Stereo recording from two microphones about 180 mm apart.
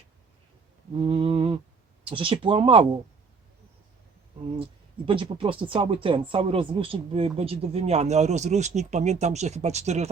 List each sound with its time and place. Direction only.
0.9 s a sound: 30° right (ahead or behind)
2.0 s speech: 30° right (ahead or behind)
4.5 s speech: 30° right (ahead or behind)